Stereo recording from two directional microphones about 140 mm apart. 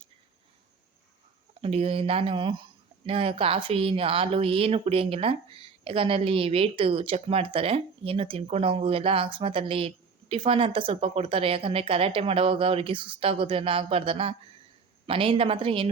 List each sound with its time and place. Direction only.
1.6 s speech: 45° right (ahead or behind)